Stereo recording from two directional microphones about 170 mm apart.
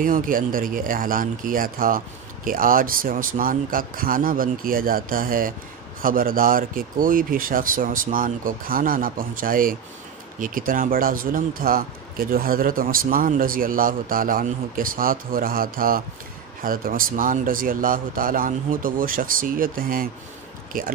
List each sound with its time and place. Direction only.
0.0 s speech: 55° right (ahead or behind)